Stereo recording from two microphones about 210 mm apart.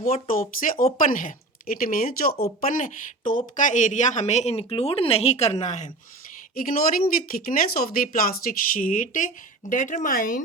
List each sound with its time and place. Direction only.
0.0 s speech: 40° left (ahead or behind)